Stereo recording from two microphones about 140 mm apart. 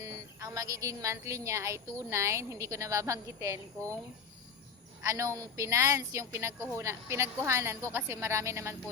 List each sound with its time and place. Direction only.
0.0 s a woman's voice: 25° right (ahead or behind)
5.0 s a woman's voice: 20° right (ahead or behind)